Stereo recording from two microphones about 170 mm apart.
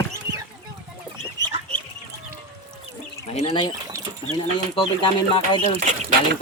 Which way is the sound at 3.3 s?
35° left (ahead or behind).